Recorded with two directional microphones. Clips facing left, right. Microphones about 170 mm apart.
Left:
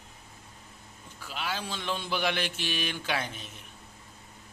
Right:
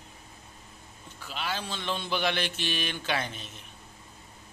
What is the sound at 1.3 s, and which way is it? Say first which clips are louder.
Mantra: right 1 dB; 10° left (ahead or behind).